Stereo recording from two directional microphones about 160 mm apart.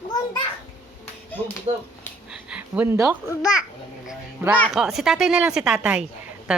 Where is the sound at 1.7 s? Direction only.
45° right (ahead or behind).